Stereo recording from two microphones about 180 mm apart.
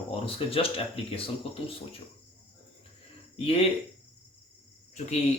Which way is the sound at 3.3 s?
30° left (ahead or behind).